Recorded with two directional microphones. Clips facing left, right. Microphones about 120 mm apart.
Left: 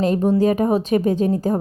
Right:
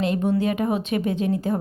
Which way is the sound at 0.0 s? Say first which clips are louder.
Left 5 dB; 35° left (ahead or behind).